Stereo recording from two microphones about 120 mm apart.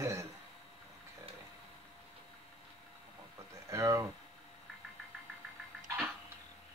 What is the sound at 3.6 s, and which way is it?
Speech, 25° right (ahead or behind).